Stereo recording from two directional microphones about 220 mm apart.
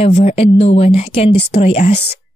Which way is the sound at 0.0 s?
30° left (ahead or behind).